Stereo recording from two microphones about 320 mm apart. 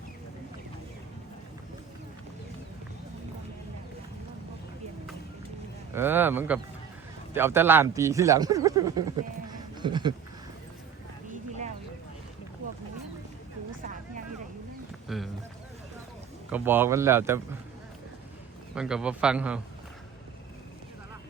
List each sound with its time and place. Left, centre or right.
5.9 s speech: centre
11.3 s a sound: right
15.0 s speech: centre
16.5 s speech: centre
18.7 s a man's voice: centre